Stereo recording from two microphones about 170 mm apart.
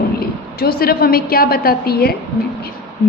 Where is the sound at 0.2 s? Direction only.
65° left (ahead or behind).